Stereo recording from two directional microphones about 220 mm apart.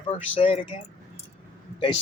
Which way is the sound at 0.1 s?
25° left (ahead or behind).